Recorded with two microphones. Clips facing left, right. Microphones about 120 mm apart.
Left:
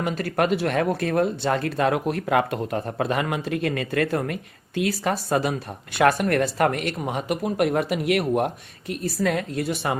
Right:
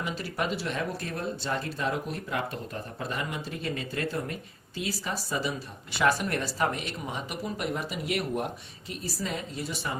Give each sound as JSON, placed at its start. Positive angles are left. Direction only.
{"t": 0.0, "sound": "speech", "side_deg": 55}